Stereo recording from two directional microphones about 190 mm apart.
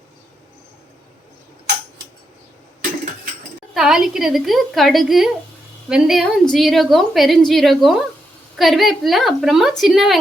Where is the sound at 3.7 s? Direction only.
Centre (ahead or behind).